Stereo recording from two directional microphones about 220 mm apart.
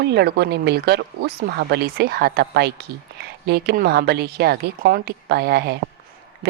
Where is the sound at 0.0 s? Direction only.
50° right (ahead or behind).